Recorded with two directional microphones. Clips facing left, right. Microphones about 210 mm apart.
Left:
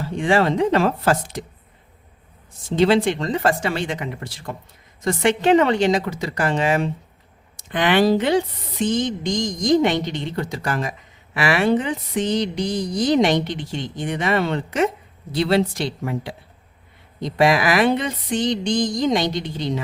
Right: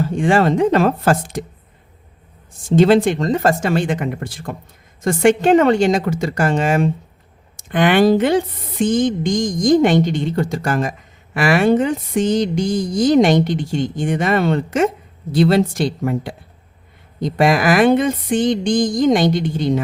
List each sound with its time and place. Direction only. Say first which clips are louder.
0.0 s speech: right 3 dB; 45° right (ahead or behind)
2.6 s speech: right 4 dB; 50° right (ahead or behind)